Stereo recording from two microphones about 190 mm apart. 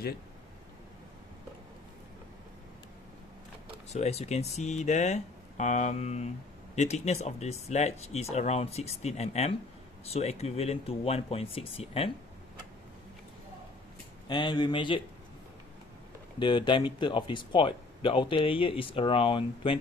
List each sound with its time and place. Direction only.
3.9 s speech: 35° left (ahead or behind)
14.2 s speech: 25° left (ahead or behind)
16.3 s speech: 25° left (ahead or behind)